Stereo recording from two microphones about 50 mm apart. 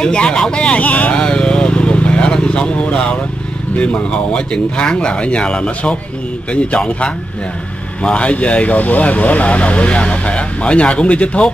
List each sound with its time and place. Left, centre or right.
0.0 s speech: centre
1.1 s vehicle: centre
3.7 s speech: left